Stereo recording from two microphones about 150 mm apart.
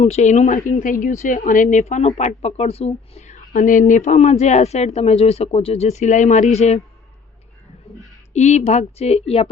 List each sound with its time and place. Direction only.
0.0 s speech: 50° left (ahead or behind)
8.3 s speech: 50° left (ahead or behind)